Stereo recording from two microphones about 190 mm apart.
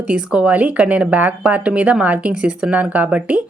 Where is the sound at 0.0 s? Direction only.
5° right (ahead or behind).